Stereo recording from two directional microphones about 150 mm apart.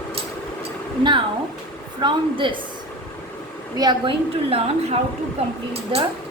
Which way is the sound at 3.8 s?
30° right (ahead or behind).